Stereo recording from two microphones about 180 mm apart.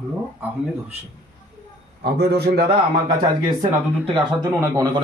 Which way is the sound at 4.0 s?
30° right (ahead or behind).